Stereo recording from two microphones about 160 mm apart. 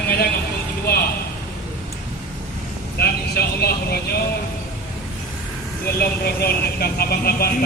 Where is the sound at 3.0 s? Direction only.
80° left.